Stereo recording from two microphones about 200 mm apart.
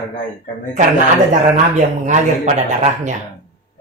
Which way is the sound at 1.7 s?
35° right (ahead or behind).